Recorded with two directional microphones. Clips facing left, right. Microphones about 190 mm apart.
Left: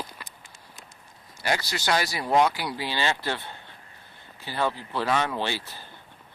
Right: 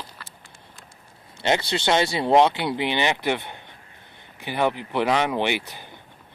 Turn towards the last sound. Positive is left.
turn(degrees=-15)  # may be behind; listen again after turning